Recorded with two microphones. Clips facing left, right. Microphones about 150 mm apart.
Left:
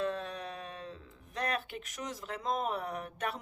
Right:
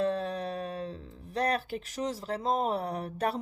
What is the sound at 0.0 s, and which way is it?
Speech, 35° right (ahead or behind).